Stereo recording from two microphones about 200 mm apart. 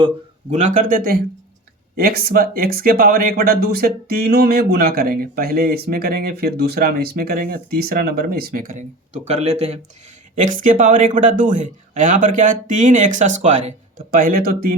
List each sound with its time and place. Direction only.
0.5 s a man's voice: 40° right (ahead or behind)